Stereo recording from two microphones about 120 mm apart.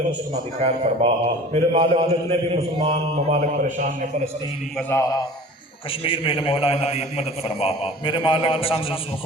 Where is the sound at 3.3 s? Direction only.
90° right.